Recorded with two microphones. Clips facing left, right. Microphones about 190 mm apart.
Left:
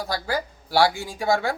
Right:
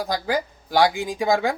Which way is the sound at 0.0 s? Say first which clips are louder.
Right 3 dB; 15° right (ahead or behind).